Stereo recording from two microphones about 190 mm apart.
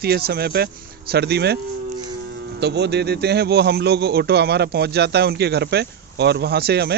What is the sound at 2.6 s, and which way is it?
A man's voice, 60° right (ahead or behind).